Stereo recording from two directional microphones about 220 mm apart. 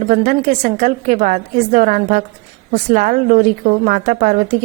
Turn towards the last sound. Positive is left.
turn(degrees=-35)  # may be behind; listen again after turning